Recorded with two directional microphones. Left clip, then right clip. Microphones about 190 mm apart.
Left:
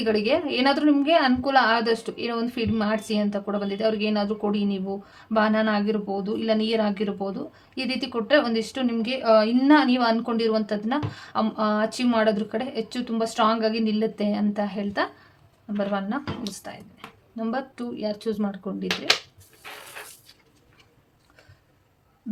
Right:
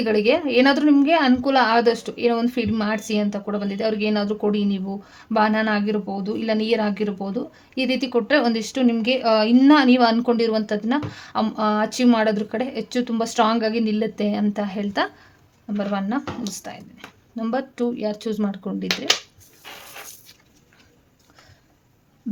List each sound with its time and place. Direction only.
0.0 s a woman's voice: 35° right (ahead or behind)